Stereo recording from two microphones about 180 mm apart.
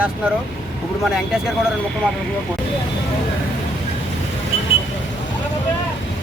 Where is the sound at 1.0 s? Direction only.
5° right (ahead or behind).